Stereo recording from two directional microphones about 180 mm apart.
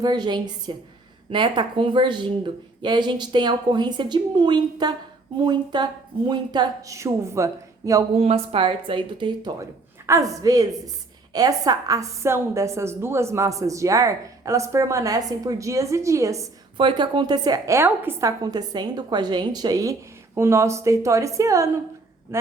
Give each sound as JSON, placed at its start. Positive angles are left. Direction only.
{"t": 0.0, "sound": "speech", "side_deg": -25}
{"t": 8.1, "sound": "a woman's voice", "side_deg": -35}